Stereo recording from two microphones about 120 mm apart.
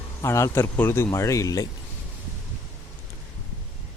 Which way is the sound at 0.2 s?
25° left (ahead or behind).